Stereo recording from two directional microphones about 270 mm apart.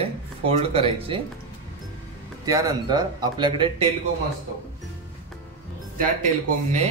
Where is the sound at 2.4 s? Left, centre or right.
Centre.